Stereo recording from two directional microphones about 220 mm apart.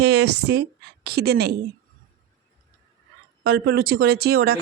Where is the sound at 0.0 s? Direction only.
50° right (ahead or behind).